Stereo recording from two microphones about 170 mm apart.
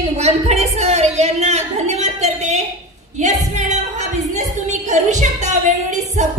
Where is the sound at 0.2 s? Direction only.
40° right (ahead or behind).